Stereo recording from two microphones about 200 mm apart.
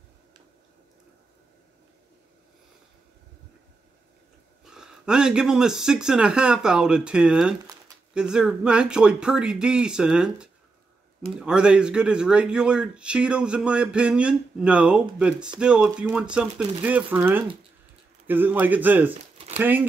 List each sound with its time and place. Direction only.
4.6 s speech: 5° right (ahead or behind)
19.3 s a sound: 30° right (ahead or behind)
19.6 s speech: 10° right (ahead or behind)